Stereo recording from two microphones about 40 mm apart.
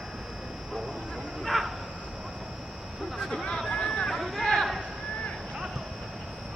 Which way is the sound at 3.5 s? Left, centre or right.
Centre.